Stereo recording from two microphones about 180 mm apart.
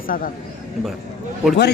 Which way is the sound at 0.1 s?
50° left (ahead or behind).